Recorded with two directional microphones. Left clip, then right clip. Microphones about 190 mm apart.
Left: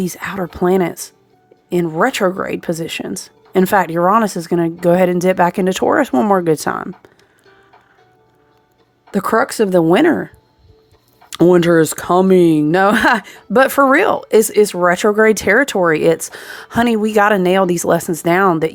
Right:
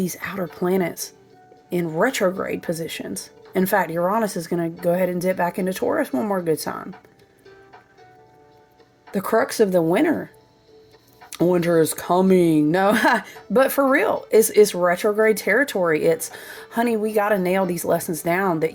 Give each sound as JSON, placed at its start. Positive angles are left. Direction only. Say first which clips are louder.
{"t": 0.0, "sound": "speech", "louder": "left 5 dB", "side_deg": 20}
{"t": 9.1, "sound": "speech", "louder": "left 4 dB", "side_deg": 30}
{"t": 11.3, "sound": "speech", "louder": "left 8 dB", "side_deg": 35}